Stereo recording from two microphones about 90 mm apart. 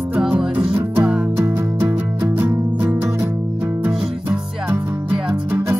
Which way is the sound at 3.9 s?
5° right (ahead or behind).